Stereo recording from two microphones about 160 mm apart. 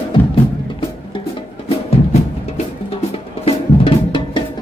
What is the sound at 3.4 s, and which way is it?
Music, 35° left (ahead or behind).